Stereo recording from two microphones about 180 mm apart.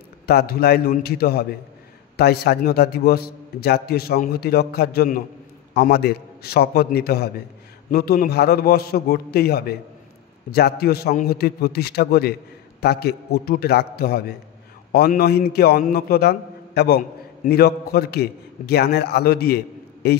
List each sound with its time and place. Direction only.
0.3 s a man's voice: 60° left (ahead or behind)